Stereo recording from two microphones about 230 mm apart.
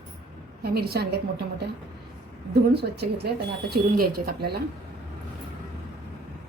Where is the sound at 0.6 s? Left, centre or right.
Right.